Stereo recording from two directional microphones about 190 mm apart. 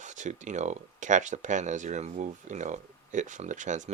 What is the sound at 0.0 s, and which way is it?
Speech, 40° right (ahead or behind).